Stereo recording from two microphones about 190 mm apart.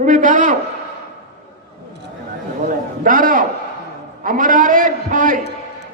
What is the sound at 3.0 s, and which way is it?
A man's voice, 45° right (ahead or behind).